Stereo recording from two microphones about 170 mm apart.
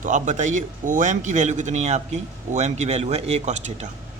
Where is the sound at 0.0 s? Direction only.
45° right (ahead or behind).